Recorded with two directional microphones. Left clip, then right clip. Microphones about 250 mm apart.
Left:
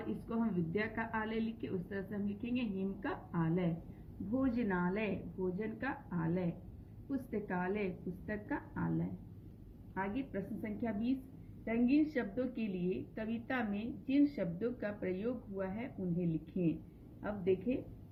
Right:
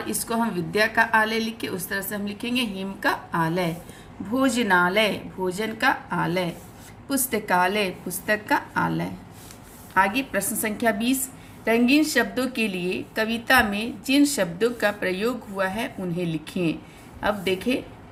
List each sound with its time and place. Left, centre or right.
0.3 s a woman's voice: right
9.9 s a woman's voice: right